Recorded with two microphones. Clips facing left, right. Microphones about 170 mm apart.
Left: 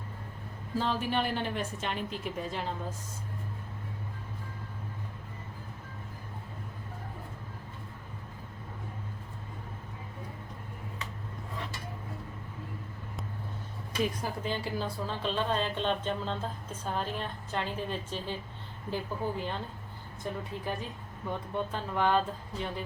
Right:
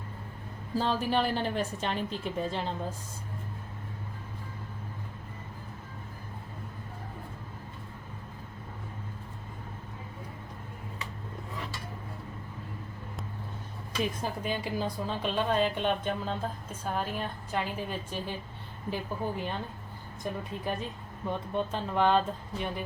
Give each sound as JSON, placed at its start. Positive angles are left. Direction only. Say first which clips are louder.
{"t": 0.8, "sound": "a woman's voice", "louder": "right 2 dB", "side_deg": -35}
{"t": 14.0, "sound": "a woman's voice", "louder": "even", "side_deg": -15}
{"t": 21.2, "sound": "speech", "louder": "right 2 dB", "side_deg": -20}